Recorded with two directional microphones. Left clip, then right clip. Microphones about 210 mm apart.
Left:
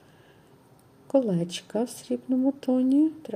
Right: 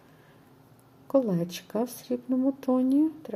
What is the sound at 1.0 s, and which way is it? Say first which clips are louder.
Speech: left 1 dB; 5° left (ahead or behind).